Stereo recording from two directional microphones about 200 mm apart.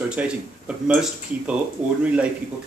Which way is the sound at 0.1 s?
5° right (ahead or behind).